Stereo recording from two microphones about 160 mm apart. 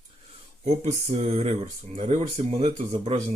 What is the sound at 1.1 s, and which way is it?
Speech, 40° right (ahead or behind).